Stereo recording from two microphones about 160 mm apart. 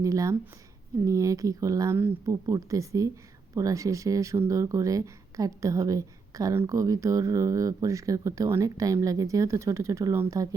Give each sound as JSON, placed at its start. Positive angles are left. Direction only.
{"t": 0.0, "sound": "speech", "side_deg": -20}